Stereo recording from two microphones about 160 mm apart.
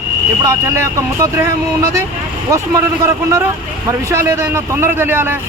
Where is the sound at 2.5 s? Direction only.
20° right (ahead or behind).